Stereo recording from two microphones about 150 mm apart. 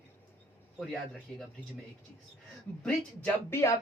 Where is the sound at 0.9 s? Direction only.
5° left (ahead or behind).